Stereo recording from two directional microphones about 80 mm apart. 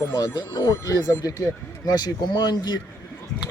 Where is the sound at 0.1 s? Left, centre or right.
Left.